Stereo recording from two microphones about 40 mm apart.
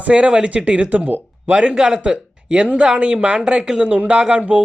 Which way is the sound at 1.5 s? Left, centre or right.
Right.